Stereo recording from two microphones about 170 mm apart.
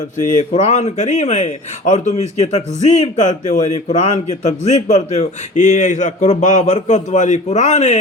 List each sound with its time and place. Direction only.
0.3 s speech: 45° left (ahead or behind)